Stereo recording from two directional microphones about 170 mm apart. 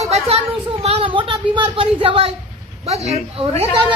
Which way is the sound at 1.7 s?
30° right (ahead or behind).